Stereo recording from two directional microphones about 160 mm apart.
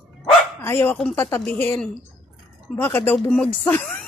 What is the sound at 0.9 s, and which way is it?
Speech, 5° left (ahead or behind).